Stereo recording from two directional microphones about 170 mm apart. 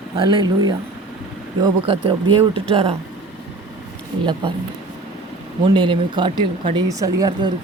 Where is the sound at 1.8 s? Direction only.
30° right (ahead or behind).